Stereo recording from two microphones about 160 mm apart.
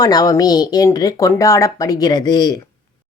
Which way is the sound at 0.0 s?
25° left (ahead or behind).